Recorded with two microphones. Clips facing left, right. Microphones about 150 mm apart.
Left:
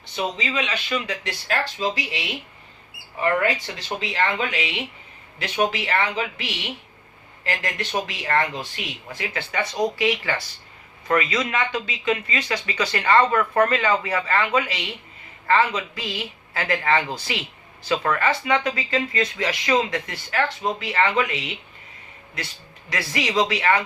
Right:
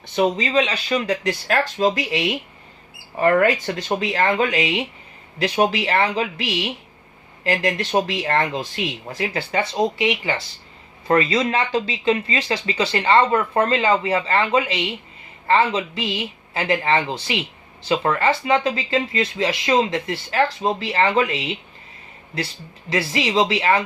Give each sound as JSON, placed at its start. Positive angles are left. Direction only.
{"t": 0.2, "sound": "speech", "side_deg": -45}
{"t": 7.4, "sound": "speech", "side_deg": -35}
{"t": 11.1, "sound": "speech", "side_deg": -30}
{"t": 22.9, "sound": "speech", "side_deg": -25}